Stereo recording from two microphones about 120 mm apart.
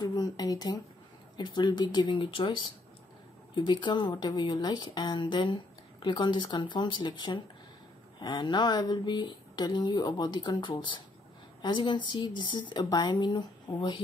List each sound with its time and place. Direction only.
0.0 s speech: 35° left (ahead or behind)